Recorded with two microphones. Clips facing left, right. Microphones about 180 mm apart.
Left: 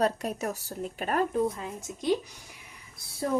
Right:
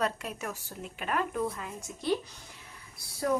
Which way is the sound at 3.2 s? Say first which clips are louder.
Even; 25° left (ahead or behind).